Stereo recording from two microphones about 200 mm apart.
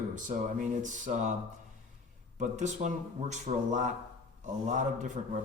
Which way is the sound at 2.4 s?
35° right (ahead or behind).